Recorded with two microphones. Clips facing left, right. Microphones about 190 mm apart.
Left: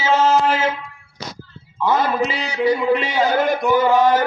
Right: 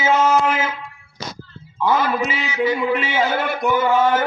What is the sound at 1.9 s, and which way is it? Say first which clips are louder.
Speech: left 2 dB; 40° left (ahead or behind).